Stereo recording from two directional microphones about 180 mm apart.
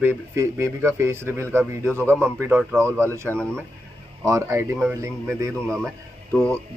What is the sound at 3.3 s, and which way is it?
Speech, 5° left (ahead or behind).